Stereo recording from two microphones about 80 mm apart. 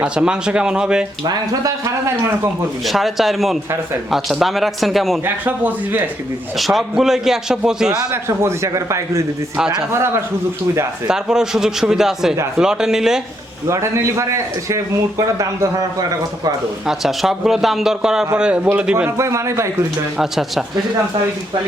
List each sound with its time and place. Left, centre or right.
0.0 s a man's voice: centre
1.2 s speech: right
2.8 s a man's voice: centre
5.2 s a man's voice: right
6.6 s a man's voice: centre
8.1 s a man's voice: right
9.6 s a man's voice: centre
11.1 s a man's voice: centre
13.7 s a man's voice: right
16.8 s a man's voice: centre
19.1 s a man's voice: right
20.1 s a man's voice: centre